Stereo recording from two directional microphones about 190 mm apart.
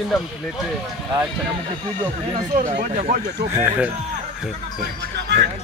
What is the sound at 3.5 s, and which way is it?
Speech, 10° right (ahead or behind).